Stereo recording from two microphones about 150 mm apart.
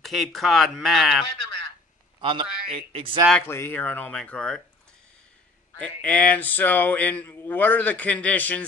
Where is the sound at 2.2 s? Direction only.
35° right (ahead or behind).